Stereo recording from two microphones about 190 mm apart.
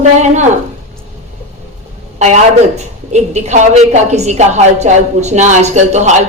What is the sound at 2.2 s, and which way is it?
A woman's voice, 40° right (ahead or behind).